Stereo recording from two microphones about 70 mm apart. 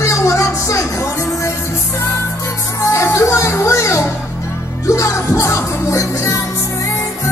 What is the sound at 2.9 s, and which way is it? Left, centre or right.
Music, left.